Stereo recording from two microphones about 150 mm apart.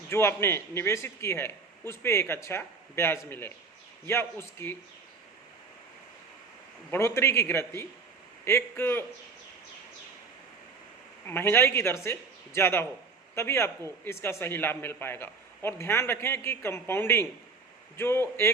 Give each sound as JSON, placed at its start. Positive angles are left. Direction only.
{"t": 0.1, "sound": "a man's voice", "side_deg": 15}
{"t": 6.9, "sound": "a man's voice", "side_deg": 15}
{"t": 11.3, "sound": "a man's voice", "side_deg": 15}